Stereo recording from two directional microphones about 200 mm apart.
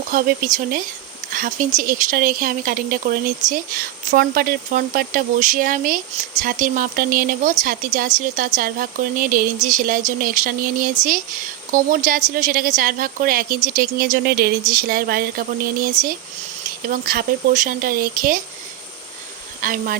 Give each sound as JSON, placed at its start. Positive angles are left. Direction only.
{"t": 0.1, "sound": "a woman's voice", "side_deg": -45}
{"t": 19.6, "sound": "speech", "side_deg": -45}